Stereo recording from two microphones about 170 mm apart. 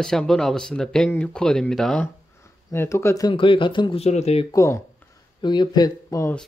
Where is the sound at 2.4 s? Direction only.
15° left (ahead or behind); by 4.5 s 40° left (ahead or behind).